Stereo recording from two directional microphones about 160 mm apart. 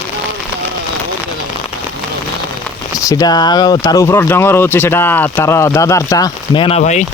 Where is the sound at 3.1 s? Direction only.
25° left (ahead or behind); by 7.0 s 45° left (ahead or behind).